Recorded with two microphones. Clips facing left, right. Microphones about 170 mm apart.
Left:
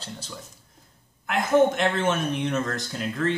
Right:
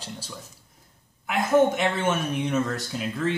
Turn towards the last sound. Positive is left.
turn(degrees=-5)  # may be behind; listen again after turning